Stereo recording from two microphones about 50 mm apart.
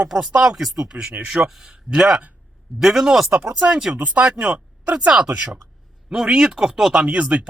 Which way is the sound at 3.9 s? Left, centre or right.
Right.